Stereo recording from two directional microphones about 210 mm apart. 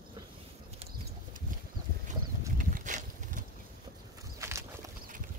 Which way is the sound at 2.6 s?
40° right (ahead or behind).